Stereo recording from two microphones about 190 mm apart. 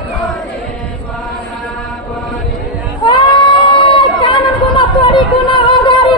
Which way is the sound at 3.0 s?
25° left (ahead or behind).